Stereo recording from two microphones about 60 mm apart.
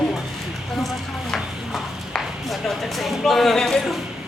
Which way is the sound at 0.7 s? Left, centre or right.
Centre.